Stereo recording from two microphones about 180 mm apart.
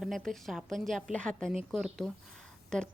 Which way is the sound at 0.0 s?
Centre (ahead or behind).